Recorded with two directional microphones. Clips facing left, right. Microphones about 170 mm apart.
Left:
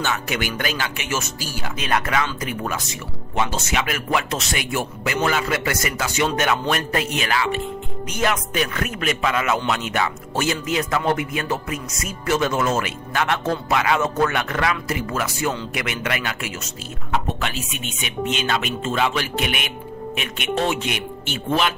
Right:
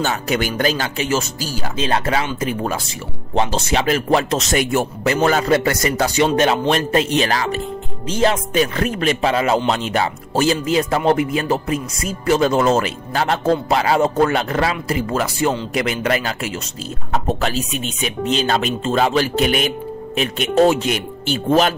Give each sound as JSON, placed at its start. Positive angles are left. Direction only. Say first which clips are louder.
{"t": 0.0, "sound": "speech", "louder": "right 5 dB", "side_deg": -35}
{"t": 8.1, "sound": "speech", "louder": "right 6 dB", "side_deg": -30}